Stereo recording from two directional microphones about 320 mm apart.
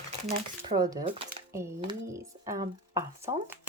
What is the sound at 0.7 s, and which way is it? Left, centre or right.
Speech, centre.